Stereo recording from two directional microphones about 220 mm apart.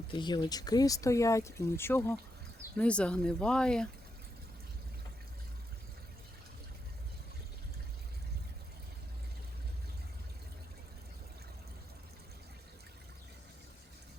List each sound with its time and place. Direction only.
0.1 s speech: 20° left (ahead or behind); by 3.8 s 5° left (ahead or behind)